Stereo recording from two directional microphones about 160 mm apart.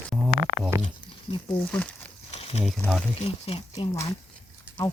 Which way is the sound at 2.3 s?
40° left (ahead or behind).